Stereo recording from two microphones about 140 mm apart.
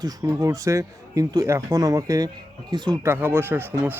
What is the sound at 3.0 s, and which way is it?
Speech, 15° right (ahead or behind).